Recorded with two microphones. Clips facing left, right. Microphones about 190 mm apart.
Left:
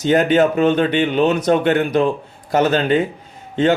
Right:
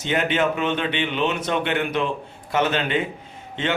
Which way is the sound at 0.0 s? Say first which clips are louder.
Left 8 dB; 40° left (ahead or behind).